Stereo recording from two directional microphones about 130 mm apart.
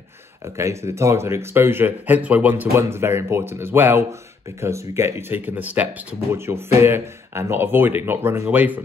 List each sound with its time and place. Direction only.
0.6 s speech: 20° right (ahead or behind)